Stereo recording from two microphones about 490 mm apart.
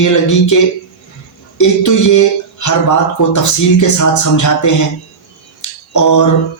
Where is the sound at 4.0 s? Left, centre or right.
Left.